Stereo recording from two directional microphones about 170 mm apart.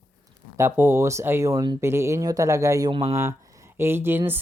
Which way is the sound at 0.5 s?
15° right (ahead or behind).